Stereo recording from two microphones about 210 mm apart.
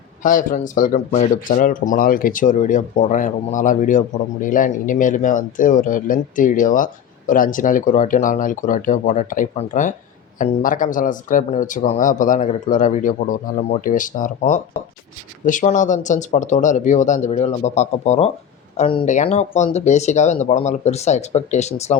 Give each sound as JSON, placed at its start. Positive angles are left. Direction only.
{"t": 0.2, "sound": "speech", "side_deg": 40}